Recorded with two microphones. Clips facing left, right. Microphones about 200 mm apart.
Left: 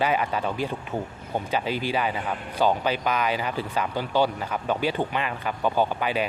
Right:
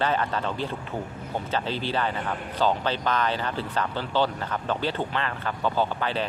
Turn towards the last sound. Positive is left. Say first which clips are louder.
# left 2 dB
turn(degrees=10)  # may be behind; listen again after turning